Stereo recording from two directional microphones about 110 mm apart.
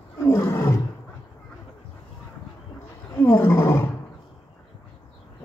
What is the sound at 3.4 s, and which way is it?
Roaring cats, 25° left (ahead or behind).